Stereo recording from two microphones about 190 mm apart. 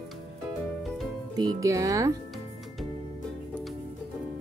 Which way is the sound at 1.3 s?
20° right (ahead or behind).